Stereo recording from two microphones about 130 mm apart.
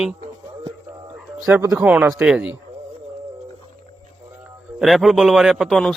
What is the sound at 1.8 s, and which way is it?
Speech, 10° right (ahead or behind).